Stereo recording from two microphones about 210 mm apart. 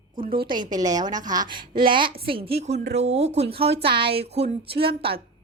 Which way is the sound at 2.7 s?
55° right (ahead or behind).